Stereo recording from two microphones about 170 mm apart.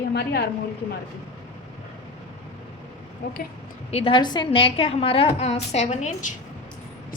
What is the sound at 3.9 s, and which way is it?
A woman's voice, 35° left (ahead or behind).